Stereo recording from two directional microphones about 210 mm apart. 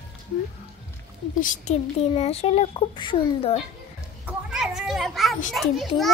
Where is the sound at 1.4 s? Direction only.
35° left (ahead or behind).